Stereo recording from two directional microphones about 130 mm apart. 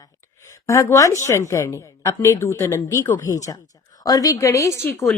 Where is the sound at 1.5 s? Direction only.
20° left (ahead or behind).